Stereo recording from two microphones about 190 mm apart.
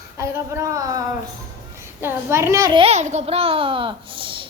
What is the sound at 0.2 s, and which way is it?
Speech, 15° right (ahead or behind).